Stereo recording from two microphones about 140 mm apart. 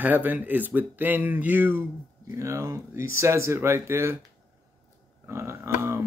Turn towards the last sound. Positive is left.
turn(degrees=-20)  # may be behind; listen again after turning